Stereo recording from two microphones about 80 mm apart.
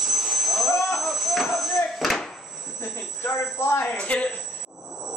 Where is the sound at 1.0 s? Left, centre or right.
Centre.